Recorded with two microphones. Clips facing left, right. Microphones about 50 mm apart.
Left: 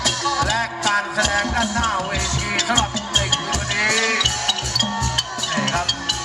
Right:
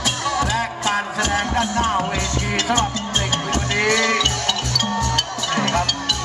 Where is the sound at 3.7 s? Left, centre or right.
Right.